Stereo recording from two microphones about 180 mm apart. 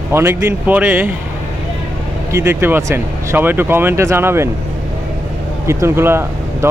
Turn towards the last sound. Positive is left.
turn(degrees=-15)  # may be behind; listen again after turning